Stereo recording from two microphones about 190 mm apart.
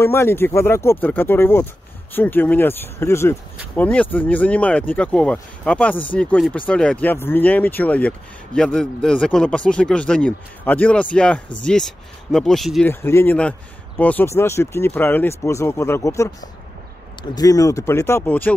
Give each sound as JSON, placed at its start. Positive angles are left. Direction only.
{"t": 0.0, "sound": "speech", "side_deg": 15}
{"t": 12.8, "sound": "speech", "side_deg": 10}